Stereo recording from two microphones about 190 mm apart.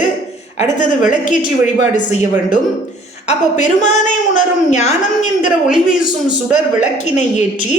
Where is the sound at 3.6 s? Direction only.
40° left (ahead or behind).